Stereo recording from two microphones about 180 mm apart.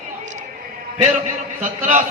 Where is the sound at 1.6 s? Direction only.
40° right (ahead or behind).